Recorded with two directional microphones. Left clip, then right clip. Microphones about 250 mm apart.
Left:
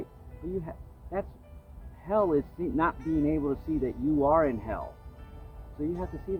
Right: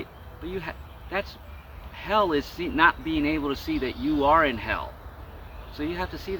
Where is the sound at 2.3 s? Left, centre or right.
Centre.